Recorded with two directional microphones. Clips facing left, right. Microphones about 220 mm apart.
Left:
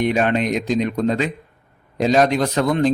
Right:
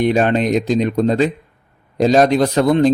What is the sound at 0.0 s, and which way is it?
A man's voice, 35° right (ahead or behind).